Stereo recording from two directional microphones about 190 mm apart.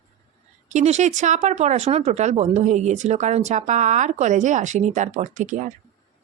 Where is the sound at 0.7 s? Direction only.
35° right (ahead or behind).